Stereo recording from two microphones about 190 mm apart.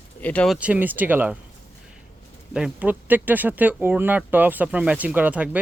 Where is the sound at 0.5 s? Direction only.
5° right (ahead or behind).